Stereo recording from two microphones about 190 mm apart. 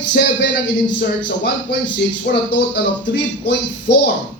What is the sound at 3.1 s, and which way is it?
Speech, 65° left (ahead or behind).